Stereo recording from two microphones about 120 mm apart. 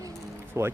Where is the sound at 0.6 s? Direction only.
25° right (ahead or behind).